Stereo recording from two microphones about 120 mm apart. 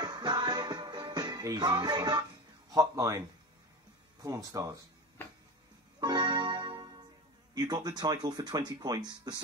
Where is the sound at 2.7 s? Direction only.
25° right (ahead or behind).